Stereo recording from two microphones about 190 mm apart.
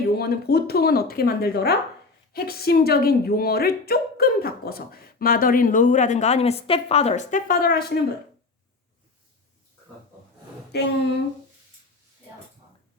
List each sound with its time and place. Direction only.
0.1 s a woman's voice: 55° left (ahead or behind)
10.7 s speech: 60° left (ahead or behind)